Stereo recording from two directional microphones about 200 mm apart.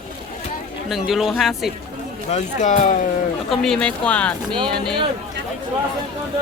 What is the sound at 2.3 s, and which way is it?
Speech, 35° left (ahead or behind).